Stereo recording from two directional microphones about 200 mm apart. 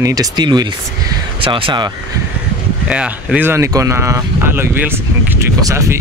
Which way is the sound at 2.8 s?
5° right (ahead or behind).